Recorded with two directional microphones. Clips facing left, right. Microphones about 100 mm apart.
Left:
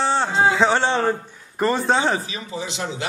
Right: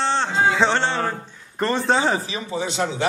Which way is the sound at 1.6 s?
5° left (ahead or behind).